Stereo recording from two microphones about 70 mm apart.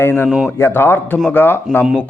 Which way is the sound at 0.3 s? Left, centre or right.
Centre.